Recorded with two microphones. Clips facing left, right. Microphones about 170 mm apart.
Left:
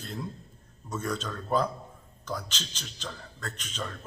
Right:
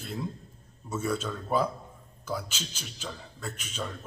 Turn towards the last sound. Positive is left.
turn(degrees=-10)  # may be behind; listen again after turning